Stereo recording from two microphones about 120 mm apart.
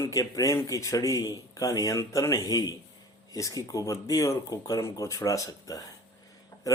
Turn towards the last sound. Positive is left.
turn(degrees=30)  # may be behind; listen again after turning